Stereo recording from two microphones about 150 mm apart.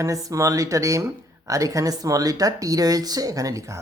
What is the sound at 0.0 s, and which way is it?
Speech, 20° right (ahead or behind).